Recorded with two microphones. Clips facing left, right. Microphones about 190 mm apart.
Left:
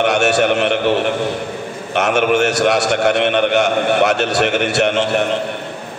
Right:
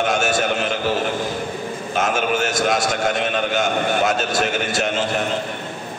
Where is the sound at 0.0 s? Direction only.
70° left (ahead or behind).